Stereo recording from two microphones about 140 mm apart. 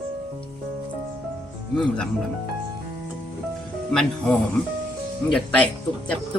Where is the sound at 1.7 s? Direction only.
5° left (ahead or behind).